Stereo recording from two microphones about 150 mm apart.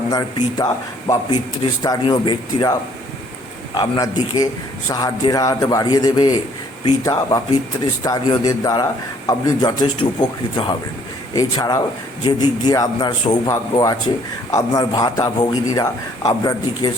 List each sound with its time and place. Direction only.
0.1 s a man's voice: 25° left (ahead or behind)
3.8 s a man's voice: 25° left (ahead or behind)